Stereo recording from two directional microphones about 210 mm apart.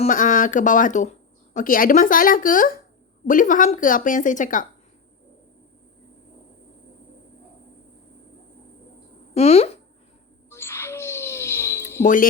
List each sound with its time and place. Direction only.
0.0 s a woman's voice: 40° left (ahead or behind)
9.3 s speech: 30° left (ahead or behind)
10.5 s a sound: 10° left (ahead or behind)
12.0 s a woman's voice: 40° left (ahead or behind)